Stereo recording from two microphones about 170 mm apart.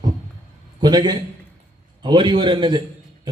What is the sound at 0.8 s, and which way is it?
A man's voice, 25° right (ahead or behind).